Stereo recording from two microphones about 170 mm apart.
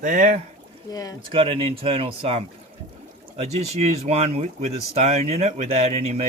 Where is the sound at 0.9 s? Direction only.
20° left (ahead or behind).